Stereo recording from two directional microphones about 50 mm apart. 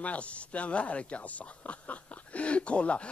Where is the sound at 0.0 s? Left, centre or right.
Left.